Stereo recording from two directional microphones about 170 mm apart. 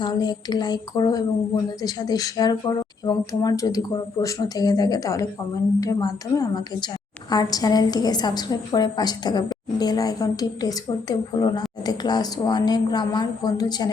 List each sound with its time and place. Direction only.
0.0 s a woman's voice: 25° left (ahead or behind)